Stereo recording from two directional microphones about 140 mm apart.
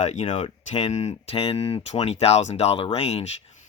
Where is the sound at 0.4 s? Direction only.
45° left (ahead or behind).